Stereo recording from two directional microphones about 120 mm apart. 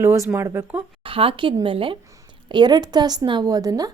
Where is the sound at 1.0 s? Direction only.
50° right (ahead or behind).